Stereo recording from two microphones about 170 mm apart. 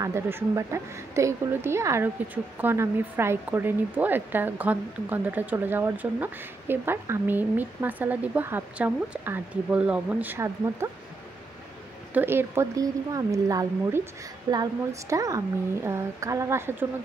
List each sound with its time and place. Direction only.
0.0 s speech: 15° right (ahead or behind)
12.1 s speech: 10° right (ahead or behind)